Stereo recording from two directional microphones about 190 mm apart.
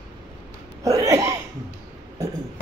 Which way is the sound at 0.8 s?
15° right (ahead or behind).